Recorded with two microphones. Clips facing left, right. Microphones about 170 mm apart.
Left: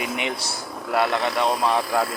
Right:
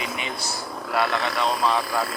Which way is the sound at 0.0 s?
70° left (ahead or behind).